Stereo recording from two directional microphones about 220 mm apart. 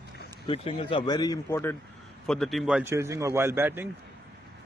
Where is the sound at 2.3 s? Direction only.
Centre (ahead or behind).